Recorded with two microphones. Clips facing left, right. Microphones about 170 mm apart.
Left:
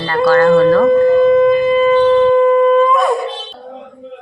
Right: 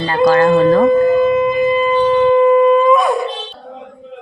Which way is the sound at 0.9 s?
10° right (ahead or behind).